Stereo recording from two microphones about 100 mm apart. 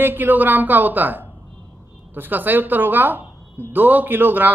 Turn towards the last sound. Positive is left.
turn(degrees=-20)  # may be behind; listen again after turning